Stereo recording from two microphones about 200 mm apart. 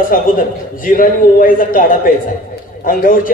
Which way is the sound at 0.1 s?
45° left (ahead or behind).